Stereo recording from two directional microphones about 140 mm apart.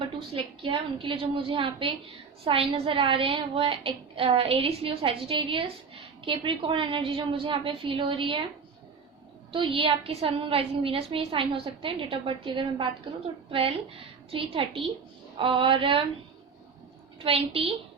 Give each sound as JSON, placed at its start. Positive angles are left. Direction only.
{"t": 0.0, "sound": "a woman's voice", "side_deg": -35}
{"t": 9.5, "sound": "a woman's voice", "side_deg": -40}
{"t": 17.2, "sound": "a woman's voice", "side_deg": -40}